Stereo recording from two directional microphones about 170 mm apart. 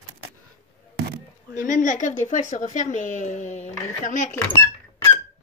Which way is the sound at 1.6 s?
50° left (ahead or behind).